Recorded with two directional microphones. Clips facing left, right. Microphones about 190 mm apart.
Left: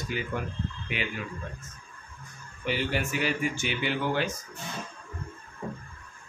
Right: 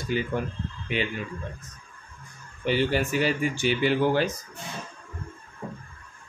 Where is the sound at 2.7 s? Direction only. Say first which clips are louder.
Right 5 dB; 35° right (ahead or behind).